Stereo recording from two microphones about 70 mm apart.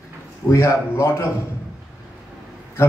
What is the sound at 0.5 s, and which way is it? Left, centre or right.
Speech, left.